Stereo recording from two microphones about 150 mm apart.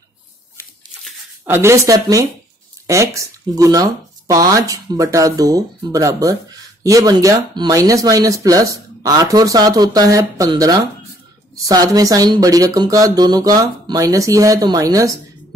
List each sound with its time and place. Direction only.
1.4 s speech: 15° right (ahead or behind)